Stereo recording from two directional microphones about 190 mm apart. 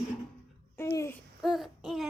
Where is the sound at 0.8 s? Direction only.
15° left (ahead or behind).